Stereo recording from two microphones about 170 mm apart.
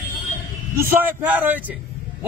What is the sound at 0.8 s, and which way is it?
A man's voice, 15° right (ahead or behind).